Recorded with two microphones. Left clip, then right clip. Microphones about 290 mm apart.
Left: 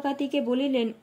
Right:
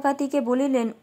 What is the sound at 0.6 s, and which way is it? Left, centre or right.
Speech, right.